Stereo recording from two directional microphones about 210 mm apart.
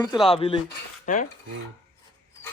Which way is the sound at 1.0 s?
35° left (ahead or behind).